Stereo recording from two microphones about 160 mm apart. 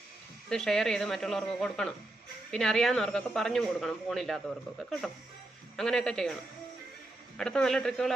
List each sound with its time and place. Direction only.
0.5 s speech: 5° left (ahead or behind)
7.3 s speech: 5° left (ahead or behind)